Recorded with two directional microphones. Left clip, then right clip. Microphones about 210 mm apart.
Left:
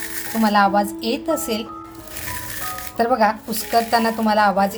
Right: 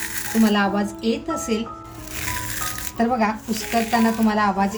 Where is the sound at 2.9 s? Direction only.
35° left (ahead or behind).